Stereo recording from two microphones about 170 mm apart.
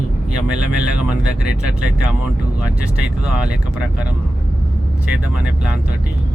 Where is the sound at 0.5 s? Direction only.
5° right (ahead or behind).